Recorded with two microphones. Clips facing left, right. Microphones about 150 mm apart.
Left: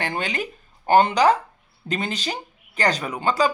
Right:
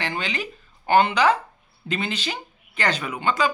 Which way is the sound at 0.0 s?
50° left (ahead or behind).